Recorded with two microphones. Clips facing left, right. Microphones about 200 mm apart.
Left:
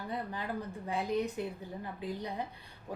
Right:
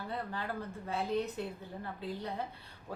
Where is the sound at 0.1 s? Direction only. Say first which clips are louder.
Left 2 dB; 15° left (ahead or behind).